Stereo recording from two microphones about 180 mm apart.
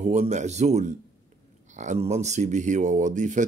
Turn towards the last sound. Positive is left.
turn(degrees=-45)  # may be behind; listen again after turning